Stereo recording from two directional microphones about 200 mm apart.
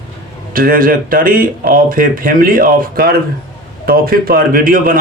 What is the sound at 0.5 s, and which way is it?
Speech, 45° right (ahead or behind).